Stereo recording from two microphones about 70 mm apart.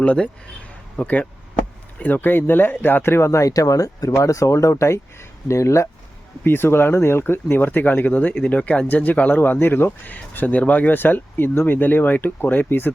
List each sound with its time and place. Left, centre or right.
0.0 s speech: centre; by 5.9 s left
6.4 s speech: left
10.2 s speech: centre